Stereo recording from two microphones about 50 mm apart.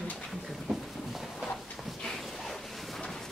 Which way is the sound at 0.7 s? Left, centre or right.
Centre.